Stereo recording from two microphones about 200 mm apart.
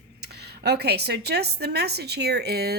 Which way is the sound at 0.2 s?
55° right (ahead or behind).